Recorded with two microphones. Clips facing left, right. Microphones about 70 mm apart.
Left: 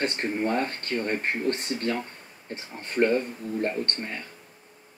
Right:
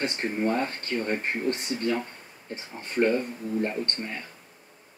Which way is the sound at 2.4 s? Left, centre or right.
Left.